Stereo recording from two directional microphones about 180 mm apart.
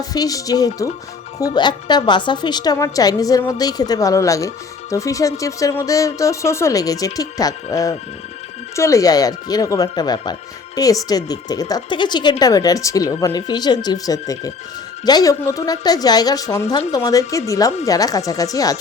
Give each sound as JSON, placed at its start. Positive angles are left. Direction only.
{"t": 0.0, "sound": "a woman's voice", "side_deg": 20}